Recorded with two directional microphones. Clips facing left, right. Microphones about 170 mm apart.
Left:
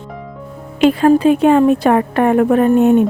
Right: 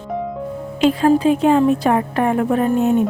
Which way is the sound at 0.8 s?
65° left (ahead or behind).